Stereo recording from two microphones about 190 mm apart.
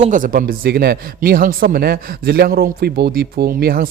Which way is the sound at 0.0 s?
45° right (ahead or behind).